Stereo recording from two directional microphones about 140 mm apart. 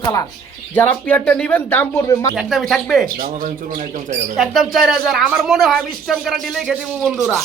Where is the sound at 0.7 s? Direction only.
10° left (ahead or behind).